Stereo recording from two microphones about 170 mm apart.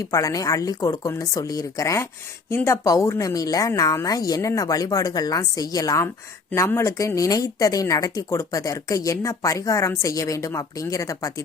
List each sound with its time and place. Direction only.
0.1 s speech: 20° left (ahead or behind)